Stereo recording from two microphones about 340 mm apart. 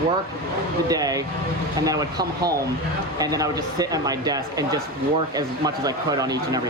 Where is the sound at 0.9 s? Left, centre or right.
Centre.